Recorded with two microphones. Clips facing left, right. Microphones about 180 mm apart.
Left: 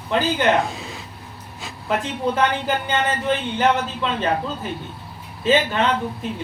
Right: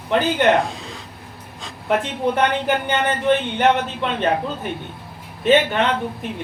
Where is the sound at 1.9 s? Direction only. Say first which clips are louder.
Right 2 dB; 60° right (ahead or behind).